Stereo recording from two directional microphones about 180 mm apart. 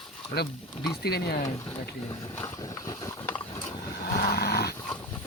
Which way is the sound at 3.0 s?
15° left (ahead or behind).